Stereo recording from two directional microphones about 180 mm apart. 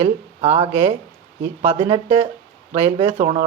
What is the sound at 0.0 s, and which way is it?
Speech, 35° right (ahead or behind).